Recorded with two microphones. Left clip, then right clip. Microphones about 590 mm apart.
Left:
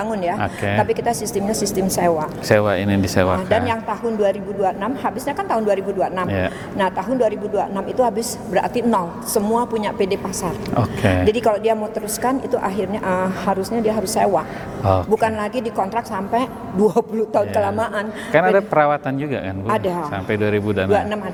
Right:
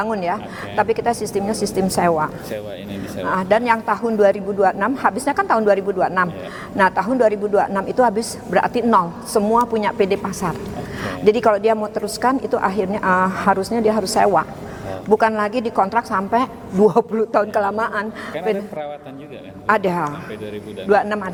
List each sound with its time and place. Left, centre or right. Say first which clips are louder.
0.0 s a woman's voice: even; right
2.5 s speech: left 12 dB; left
3.3 s a woman's voice: right 3 dB; right
15.2 s a woman's voice: right 2 dB; right
18.7 s speech: left 13 dB; left
19.6 s speech: right 4 dB; right
20.3 s speech: left 11 dB; left